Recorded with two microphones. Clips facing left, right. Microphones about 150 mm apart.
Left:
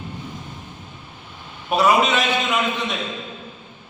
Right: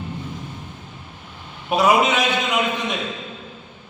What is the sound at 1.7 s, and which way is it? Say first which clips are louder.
Speech: even; 20° right (ahead or behind).